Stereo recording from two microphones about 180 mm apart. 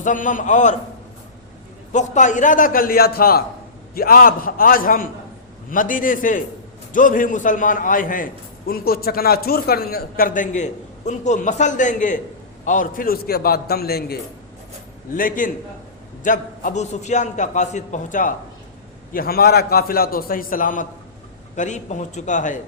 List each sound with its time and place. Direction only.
0.0 s a man's voice: 45° left (ahead or behind)
1.9 s a man's voice: 45° left (ahead or behind); by 14.2 s 60° left (ahead or behind)
15.1 s a man's voice: 50° left (ahead or behind)